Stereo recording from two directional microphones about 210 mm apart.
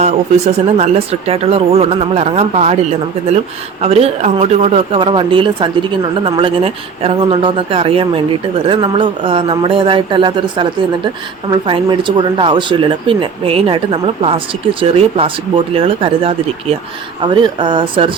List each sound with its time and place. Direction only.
0.0 s speech: 30° right (ahead or behind)
3.8 s speech: 30° right (ahead or behind)